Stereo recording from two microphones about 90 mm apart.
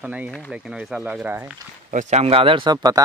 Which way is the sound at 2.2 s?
90° right.